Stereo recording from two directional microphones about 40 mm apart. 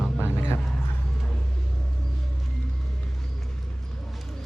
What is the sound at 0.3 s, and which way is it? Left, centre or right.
Vehicle, left.